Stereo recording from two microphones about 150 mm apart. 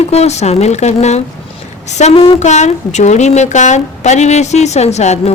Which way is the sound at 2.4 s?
50° left (ahead or behind).